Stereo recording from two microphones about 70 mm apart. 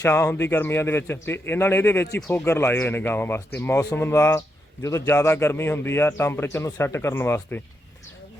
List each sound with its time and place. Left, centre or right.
0.0 s a man's voice: left